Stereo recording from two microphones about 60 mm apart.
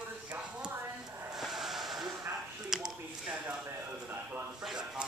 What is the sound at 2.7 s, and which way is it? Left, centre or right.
Speech, centre.